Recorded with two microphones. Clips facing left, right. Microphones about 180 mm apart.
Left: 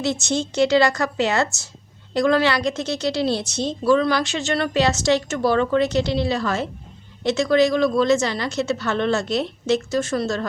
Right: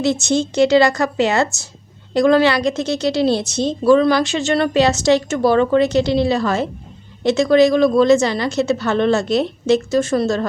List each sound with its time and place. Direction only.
0.0 s a woman's voice: 15° right (ahead or behind)